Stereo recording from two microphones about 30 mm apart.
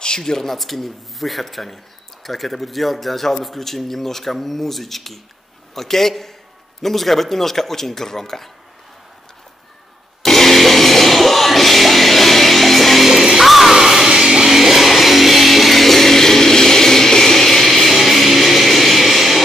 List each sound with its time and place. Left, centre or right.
0.0 s speech: left
0.5 s a man's voice: centre
10.2 s music: centre
13.1 s music: centre